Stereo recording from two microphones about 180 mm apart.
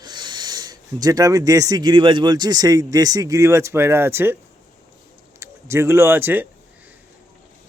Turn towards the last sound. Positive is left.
turn(degrees=-10)  # may be behind; listen again after turning